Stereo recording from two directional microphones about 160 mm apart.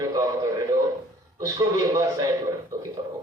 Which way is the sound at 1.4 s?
20° right (ahead or behind).